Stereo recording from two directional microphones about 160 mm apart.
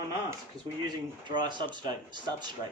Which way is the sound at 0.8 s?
25° right (ahead or behind).